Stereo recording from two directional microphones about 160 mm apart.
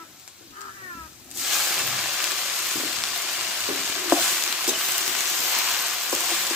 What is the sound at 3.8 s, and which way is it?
Frying, 5° right (ahead or behind).